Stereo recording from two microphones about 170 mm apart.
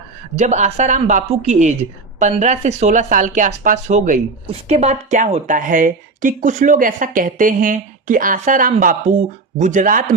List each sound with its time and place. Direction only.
0.3 s speech: 45° right (ahead or behind)